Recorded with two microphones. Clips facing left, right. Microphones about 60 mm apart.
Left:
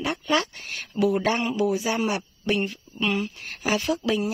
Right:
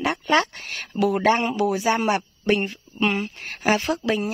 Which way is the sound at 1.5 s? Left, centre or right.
Right.